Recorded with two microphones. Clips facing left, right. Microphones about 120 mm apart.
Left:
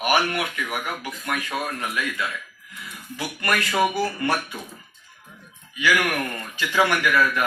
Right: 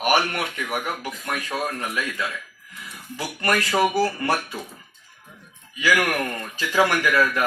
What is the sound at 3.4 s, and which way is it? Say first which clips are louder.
A man's voice: right 1 dB; 35° right (ahead or behind).